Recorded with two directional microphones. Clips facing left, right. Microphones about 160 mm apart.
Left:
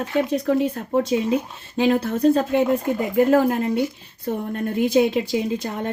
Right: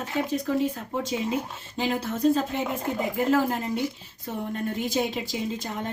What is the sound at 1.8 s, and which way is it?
A woman's voice, 60° left (ahead or behind).